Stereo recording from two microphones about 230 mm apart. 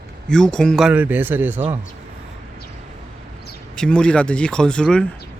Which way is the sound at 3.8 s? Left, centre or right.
Centre.